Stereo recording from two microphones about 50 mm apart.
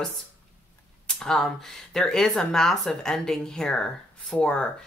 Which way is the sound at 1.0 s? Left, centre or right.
Centre.